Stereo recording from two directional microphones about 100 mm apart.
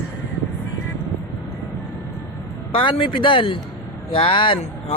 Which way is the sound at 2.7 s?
60° left (ahead or behind).